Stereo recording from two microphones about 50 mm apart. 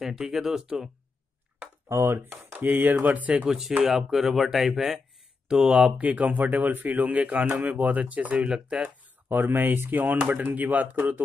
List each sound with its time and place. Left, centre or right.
0.0 s speech: centre
1.9 s speech: right
2.5 s a man's voice: right
3.4 s speech: centre
6.0 s a man's voice: right
8.5 s speech: centre
9.0 s a man's voice: right